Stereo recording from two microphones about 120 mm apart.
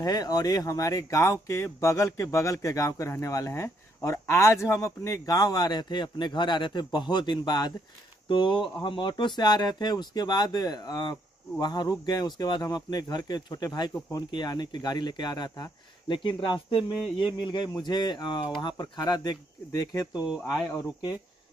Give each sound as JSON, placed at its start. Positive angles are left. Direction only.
{"t": 0.0, "sound": "speech", "side_deg": 35}
{"t": 20.2, "sound": "speech", "side_deg": -5}